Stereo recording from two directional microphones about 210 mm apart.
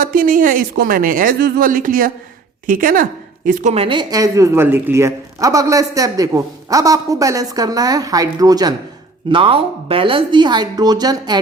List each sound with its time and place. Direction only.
0.0 s a woman's voice: 40° right (ahead or behind); by 11.3 s 20° right (ahead or behind)